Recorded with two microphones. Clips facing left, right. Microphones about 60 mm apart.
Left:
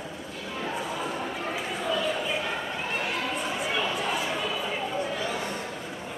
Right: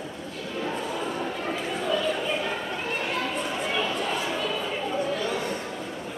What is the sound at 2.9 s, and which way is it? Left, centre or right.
Chatter, centre.